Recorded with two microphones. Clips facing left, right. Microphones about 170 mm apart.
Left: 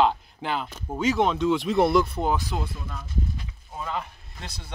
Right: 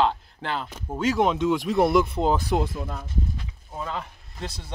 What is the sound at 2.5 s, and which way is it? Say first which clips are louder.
Speech: right 7 dB; 90° right.